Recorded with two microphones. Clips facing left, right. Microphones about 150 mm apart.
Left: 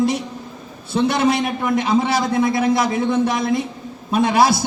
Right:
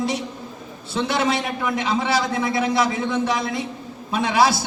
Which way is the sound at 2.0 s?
55° left (ahead or behind).